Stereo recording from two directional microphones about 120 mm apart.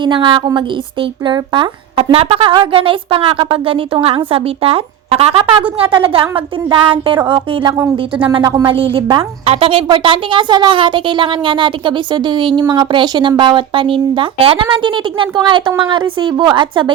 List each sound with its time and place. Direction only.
0.0 s a woman's voice: 45° right (ahead or behind)
2.1 s a woman's voice: 50° right (ahead or behind)